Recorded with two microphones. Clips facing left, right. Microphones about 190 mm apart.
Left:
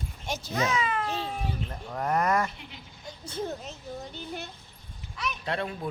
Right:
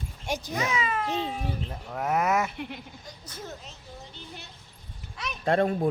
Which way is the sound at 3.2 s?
30° left (ahead or behind).